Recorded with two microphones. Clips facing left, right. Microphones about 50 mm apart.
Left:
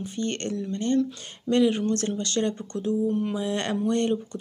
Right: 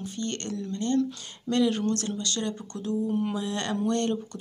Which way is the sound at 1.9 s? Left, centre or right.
Left.